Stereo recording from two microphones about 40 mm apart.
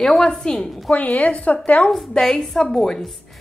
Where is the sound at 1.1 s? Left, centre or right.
Left.